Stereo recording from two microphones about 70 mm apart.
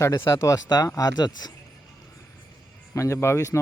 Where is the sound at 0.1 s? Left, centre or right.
Left.